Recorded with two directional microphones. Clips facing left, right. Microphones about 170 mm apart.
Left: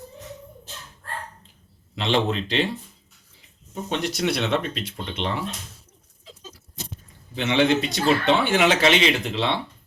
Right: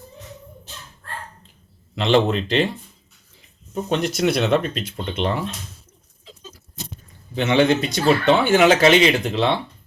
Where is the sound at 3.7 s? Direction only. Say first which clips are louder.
Right 5 dB; 45° right (ahead or behind).